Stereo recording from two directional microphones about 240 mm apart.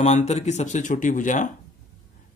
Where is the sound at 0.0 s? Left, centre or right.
Left.